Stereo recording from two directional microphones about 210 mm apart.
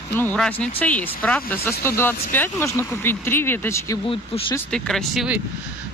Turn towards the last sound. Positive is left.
turn(degrees=0)  # may be behind; listen again after turning